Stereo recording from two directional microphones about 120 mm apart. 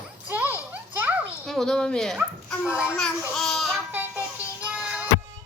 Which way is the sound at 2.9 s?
5° left (ahead or behind).